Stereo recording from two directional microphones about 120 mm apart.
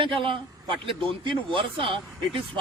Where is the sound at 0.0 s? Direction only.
45° right (ahead or behind).